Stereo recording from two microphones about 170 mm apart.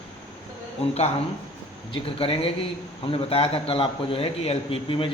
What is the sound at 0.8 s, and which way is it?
A man's voice, 35° left (ahead or behind).